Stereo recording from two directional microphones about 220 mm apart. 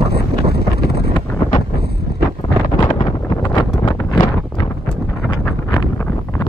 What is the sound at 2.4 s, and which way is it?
Wind noise, 20° left (ahead or behind).